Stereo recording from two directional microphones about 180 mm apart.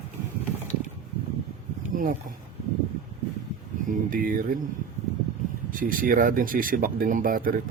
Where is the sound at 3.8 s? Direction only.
50° right (ahead or behind).